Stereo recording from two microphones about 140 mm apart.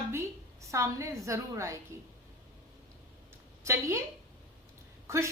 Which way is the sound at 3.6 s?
20° right (ahead or behind).